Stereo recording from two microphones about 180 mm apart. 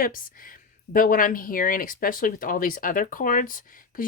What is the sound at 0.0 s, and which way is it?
Speech, 50° left (ahead or behind).